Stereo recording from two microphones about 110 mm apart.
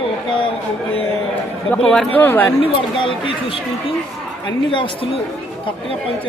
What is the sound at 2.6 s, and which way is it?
Speech, 50° left (ahead or behind).